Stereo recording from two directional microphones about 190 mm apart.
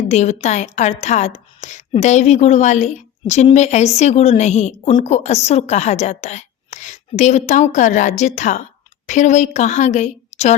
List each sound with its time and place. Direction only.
0.1 s a woman's voice: 35° left (ahead or behind)